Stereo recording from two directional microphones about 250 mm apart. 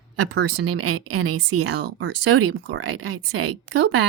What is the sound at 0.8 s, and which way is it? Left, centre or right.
Speech, right.